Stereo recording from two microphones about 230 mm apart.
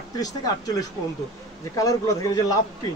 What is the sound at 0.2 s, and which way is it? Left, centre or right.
Speech, centre.